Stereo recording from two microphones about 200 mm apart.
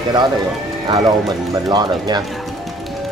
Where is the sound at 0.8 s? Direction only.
20° right (ahead or behind).